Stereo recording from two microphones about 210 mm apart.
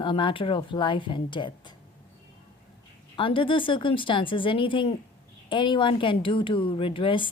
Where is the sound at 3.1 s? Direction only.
25° left (ahead or behind).